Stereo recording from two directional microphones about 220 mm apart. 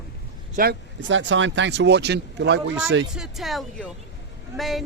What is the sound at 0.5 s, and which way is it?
Speech, 45° right (ahead or behind).